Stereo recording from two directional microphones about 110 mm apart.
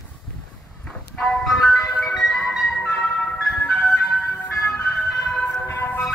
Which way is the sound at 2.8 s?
15° left (ahead or behind).